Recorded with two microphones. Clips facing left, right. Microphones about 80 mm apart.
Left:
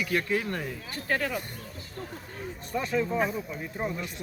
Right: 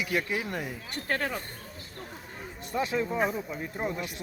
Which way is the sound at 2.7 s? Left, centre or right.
Centre.